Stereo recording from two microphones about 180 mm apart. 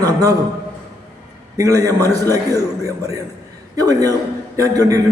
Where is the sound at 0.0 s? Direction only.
20° right (ahead or behind).